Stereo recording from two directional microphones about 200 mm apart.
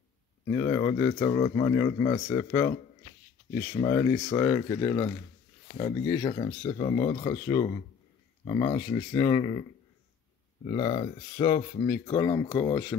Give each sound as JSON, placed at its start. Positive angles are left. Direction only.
{"t": 0.6, "sound": "speech", "side_deg": 20}
{"t": 3.7, "sound": "speech", "side_deg": 20}
{"t": 10.7, "sound": "speech", "side_deg": 30}